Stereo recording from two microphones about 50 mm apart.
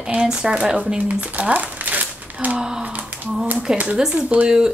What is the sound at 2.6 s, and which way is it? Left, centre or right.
Speech, centre.